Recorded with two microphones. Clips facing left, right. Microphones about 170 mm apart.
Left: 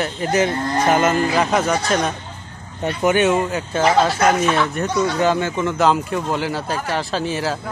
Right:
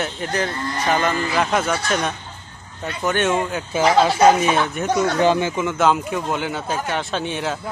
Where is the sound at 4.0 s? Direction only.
15° right (ahead or behind).